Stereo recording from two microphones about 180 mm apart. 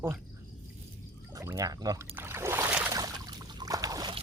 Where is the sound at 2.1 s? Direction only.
15° right (ahead or behind).